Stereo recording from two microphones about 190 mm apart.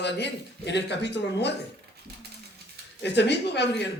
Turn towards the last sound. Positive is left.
turn(degrees=65)  # may be behind; listen again after turning